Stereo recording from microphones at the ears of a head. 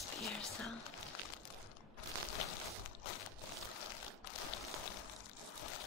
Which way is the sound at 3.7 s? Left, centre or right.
Left.